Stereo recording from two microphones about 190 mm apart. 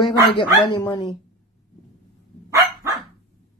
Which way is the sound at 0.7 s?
20° left (ahead or behind).